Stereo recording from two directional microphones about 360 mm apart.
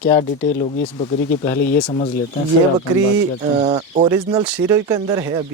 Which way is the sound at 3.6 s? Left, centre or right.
Centre.